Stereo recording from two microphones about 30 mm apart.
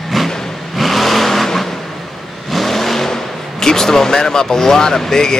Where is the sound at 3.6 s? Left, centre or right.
Centre.